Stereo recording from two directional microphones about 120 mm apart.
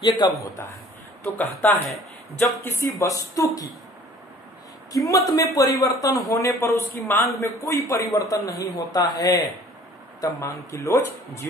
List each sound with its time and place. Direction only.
0.1 s a man's voice: centre (ahead or behind)
1.2 s speech: 15° left (ahead or behind)
2.8 s speech: 25° left (ahead or behind)
4.9 s speech: 25° left (ahead or behind)